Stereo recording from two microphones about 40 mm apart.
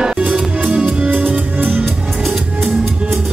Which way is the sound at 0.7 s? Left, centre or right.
Right.